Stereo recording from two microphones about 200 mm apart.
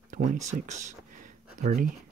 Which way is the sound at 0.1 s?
40° right (ahead or behind).